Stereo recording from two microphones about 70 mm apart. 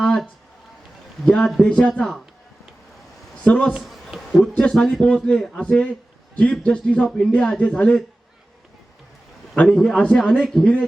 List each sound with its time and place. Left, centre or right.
0.0 s a sound: centre
1.2 s a man's voice: centre
2.0 s a man's voice: centre
3.4 s a man's voice: centre
3.8 s a sound: centre
4.7 s a man's voice: centre
9.6 s a man's voice: centre